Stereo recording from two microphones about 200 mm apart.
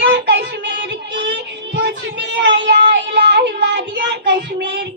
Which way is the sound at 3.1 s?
60° right (ahead or behind).